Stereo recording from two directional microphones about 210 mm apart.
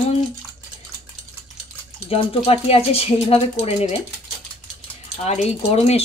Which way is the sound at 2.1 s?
30° left (ahead or behind).